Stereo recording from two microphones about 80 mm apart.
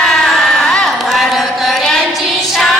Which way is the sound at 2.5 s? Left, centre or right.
Centre.